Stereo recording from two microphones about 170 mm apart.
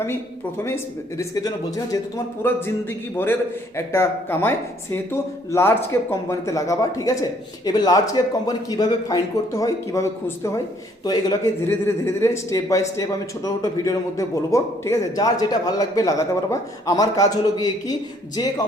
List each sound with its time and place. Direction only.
0.6 s speech: 15° left (ahead or behind)
3.8 s a man's voice: 15° left (ahead or behind)